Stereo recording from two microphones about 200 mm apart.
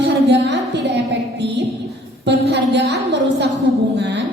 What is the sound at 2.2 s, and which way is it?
A woman's voice, 60° right (ahead or behind).